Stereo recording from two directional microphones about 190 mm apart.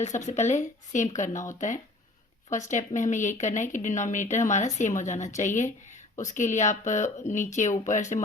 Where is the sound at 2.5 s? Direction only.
40° left (ahead or behind).